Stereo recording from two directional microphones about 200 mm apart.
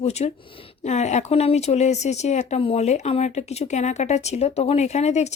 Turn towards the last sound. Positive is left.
turn(degrees=35)  # may be behind; listen again after turning